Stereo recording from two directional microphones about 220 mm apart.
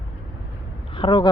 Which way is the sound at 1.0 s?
20° left (ahead or behind).